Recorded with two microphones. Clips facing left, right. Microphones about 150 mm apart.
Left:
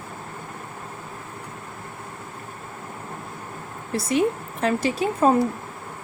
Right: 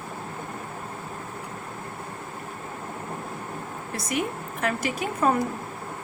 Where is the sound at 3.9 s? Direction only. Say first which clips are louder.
Left 7 dB; 30° left (ahead or behind).